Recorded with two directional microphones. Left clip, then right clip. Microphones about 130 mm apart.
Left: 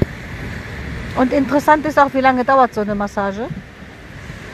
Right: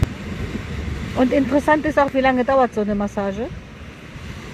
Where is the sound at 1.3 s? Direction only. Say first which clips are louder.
Left 4 dB; 20° right (ahead or behind).